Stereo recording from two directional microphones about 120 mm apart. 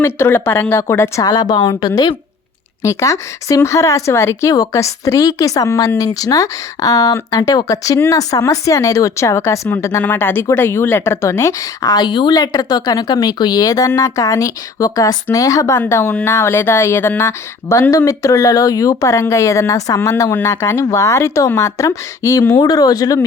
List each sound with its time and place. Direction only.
0.0 s speech: 20° left (ahead or behind)
1.2 s speech: 35° left (ahead or behind)
2.8 s speech: 25° left (ahead or behind)